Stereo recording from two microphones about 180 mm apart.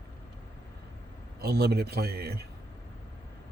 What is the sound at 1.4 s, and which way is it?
Speech, 65° right (ahead or behind).